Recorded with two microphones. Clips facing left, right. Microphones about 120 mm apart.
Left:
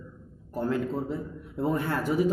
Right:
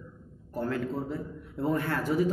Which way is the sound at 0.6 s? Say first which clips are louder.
Left 3 dB; 20° left (ahead or behind).